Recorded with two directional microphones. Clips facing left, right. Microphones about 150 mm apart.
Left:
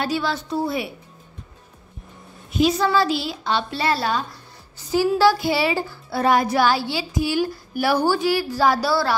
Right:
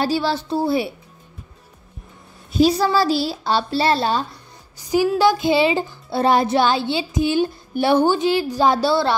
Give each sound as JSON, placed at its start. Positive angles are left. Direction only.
{"t": 0.0, "sound": "a woman's voice", "side_deg": -30}
{"t": 2.5, "sound": "a woman's voice", "side_deg": -35}
{"t": 4.7, "sound": "speech", "side_deg": -15}